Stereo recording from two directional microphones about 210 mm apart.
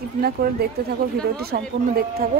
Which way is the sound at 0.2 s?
45° right (ahead or behind).